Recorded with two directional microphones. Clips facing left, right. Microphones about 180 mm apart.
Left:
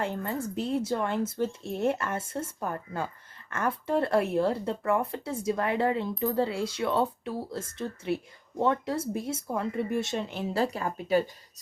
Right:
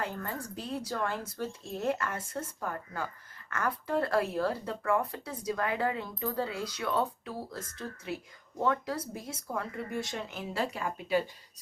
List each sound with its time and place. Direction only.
0.0 s speech: 25° left (ahead or behind); by 11.2 s 40° left (ahead or behind)